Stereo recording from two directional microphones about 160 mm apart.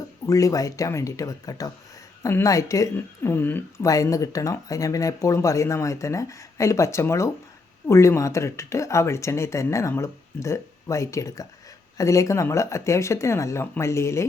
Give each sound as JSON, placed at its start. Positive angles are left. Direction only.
{"t": 0.3, "sound": "a woman's voice", "side_deg": 20}